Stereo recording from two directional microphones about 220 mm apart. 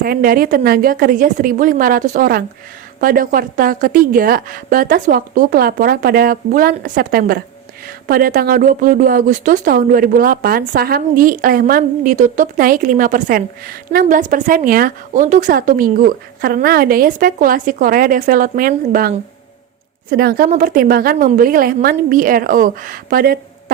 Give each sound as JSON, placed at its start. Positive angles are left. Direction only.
{"t": 0.0, "sound": "speech", "side_deg": -40}